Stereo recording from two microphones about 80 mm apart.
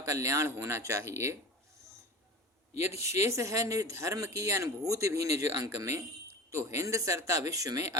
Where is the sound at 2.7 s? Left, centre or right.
Right.